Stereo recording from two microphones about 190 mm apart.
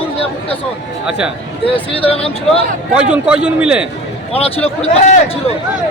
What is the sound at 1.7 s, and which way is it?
Speech, 30° left (ahead or behind).